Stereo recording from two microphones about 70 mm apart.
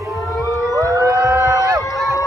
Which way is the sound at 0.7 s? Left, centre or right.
Right.